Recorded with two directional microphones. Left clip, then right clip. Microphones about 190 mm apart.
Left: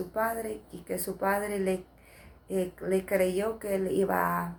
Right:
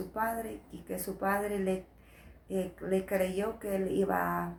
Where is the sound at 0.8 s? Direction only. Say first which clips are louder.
Left 4 dB; 20° left (ahead or behind).